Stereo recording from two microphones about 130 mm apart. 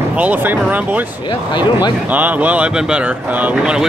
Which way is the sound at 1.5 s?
35° left (ahead or behind).